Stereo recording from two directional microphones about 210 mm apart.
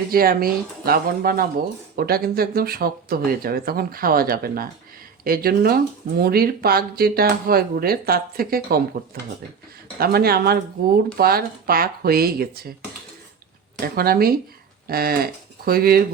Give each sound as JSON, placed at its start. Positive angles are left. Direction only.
{"t": 0.1, "sound": "speech", "side_deg": -45}
{"t": 13.8, "sound": "speech", "side_deg": -45}